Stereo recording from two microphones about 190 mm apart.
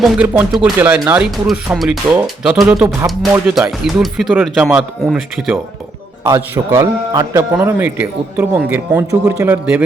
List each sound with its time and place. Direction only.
0.0 s a man's voice: 5° right (ahead or behind)
6.2 s a man's voice: 15° right (ahead or behind)